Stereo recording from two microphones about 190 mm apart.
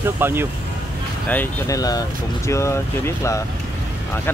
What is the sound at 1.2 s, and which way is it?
Speech, 15° left (ahead or behind).